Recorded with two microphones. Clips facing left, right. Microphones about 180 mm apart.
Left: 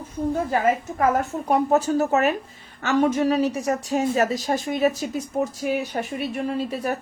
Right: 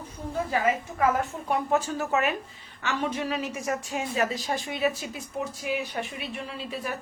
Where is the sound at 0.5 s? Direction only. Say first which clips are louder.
Left 4 dB; 45° left (ahead or behind).